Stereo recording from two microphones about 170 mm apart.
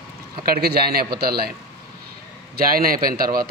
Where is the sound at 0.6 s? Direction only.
70° right (ahead or behind).